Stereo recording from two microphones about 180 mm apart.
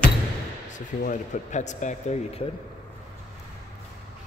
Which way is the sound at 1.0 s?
40° left (ahead or behind).